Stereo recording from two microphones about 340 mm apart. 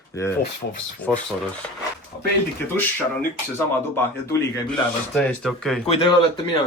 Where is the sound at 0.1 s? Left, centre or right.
Centre.